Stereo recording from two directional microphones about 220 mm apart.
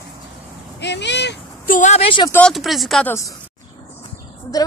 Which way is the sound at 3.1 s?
15° left (ahead or behind).